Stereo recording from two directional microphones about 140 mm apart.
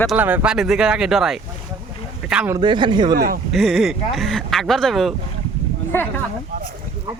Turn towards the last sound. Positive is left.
turn(degrees=15)  # may be behind; listen again after turning